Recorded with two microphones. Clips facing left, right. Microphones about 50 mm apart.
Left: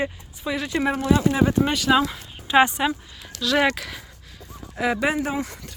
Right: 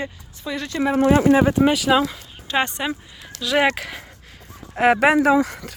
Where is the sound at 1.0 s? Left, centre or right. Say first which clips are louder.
Right 6 dB; right.